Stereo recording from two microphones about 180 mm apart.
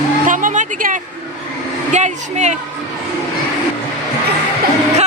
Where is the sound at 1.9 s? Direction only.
40° right (ahead or behind).